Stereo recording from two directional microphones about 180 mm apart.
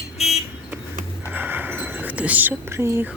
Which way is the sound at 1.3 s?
10° right (ahead or behind).